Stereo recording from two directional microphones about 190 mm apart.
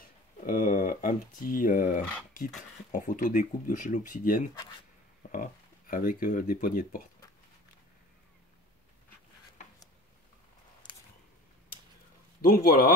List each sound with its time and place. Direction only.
0.5 s speech: 45° left (ahead or behind)
12.4 s speech: 50° left (ahead or behind)